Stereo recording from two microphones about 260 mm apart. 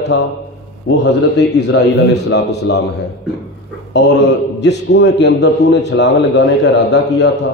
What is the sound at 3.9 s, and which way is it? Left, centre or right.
A man's voice, left.